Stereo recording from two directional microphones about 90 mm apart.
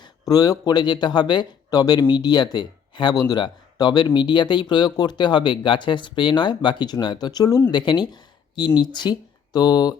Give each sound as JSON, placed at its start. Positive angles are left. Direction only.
{"t": 0.0, "sound": "speech", "side_deg": 45}
{"t": 7.7, "sound": "speech", "side_deg": 55}